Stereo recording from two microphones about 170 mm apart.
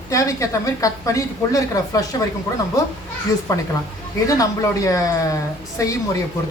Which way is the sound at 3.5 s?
20° left (ahead or behind).